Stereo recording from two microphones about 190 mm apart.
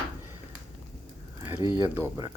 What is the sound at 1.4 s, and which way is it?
Speech, 10° right (ahead or behind).